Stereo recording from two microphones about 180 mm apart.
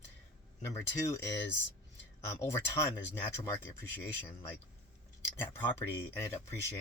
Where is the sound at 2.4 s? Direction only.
15° left (ahead or behind).